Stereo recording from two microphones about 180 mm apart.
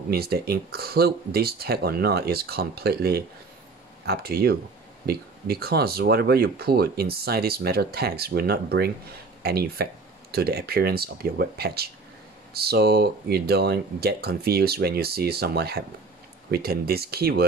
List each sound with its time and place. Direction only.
0.1 s speech: 60° right (ahead or behind)